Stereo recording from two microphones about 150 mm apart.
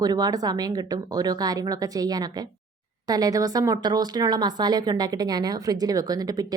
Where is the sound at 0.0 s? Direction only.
25° right (ahead or behind).